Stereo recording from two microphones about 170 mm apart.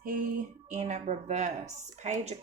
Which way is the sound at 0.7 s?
40° right (ahead or behind).